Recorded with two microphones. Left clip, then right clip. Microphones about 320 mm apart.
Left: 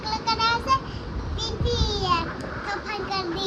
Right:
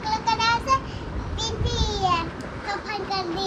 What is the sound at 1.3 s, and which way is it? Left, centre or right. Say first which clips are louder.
Child singing: left 1 dB; centre.